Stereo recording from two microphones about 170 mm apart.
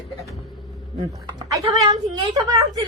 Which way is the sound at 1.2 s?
25° right (ahead or behind).